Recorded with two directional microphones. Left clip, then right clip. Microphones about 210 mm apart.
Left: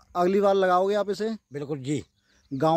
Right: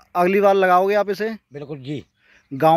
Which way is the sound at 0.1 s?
5° left (ahead or behind).